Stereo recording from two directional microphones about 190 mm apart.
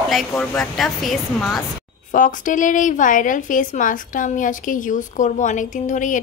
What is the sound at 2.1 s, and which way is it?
A woman's voice, 45° left (ahead or behind).